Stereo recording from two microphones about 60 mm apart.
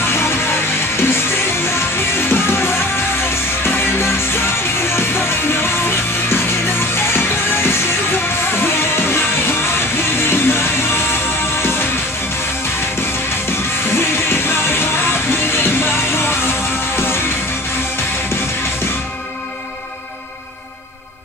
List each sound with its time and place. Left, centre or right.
0.0 s music: left
13.8 s music: left